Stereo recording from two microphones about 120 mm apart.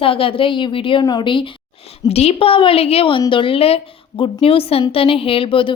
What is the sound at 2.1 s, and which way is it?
A woman's voice, 60° left (ahead or behind).